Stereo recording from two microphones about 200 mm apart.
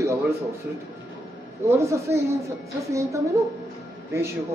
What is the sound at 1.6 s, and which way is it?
Speech, 15° right (ahead or behind).